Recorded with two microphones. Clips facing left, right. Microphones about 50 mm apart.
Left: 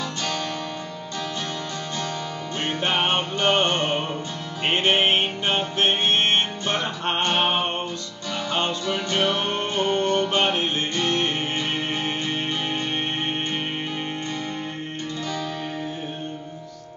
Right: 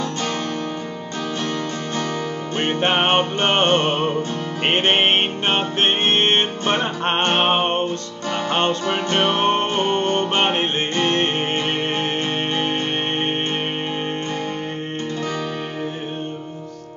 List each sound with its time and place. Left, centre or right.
2.6 s music: right